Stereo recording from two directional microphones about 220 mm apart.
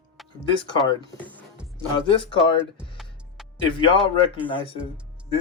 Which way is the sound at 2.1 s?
20° left (ahead or behind).